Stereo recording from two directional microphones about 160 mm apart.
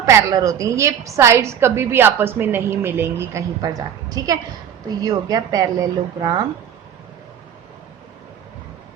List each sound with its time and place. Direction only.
0.0 s a woman's voice: 20° right (ahead or behind)